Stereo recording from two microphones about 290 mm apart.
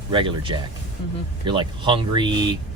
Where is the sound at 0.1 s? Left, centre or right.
Centre.